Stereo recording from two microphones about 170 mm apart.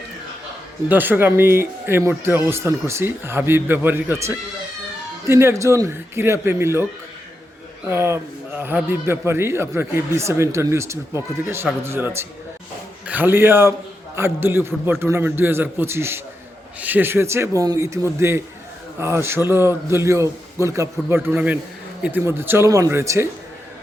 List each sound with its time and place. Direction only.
0.9 s a man's voice: 10° right (ahead or behind)
7.9 s a man's voice: 15° right (ahead or behind)